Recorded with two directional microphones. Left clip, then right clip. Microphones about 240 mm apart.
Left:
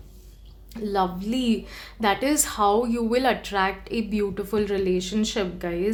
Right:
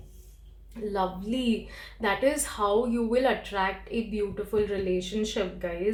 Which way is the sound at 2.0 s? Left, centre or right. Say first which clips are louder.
Left 3 dB; left.